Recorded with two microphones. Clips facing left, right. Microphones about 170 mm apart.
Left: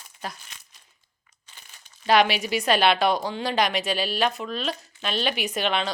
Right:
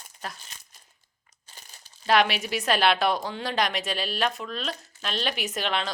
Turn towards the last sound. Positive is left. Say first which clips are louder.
# left 3 dB
turn(degrees=0)  # may be behind; listen again after turning